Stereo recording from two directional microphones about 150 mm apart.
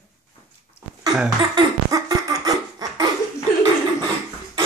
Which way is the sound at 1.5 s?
25° right (ahead or behind).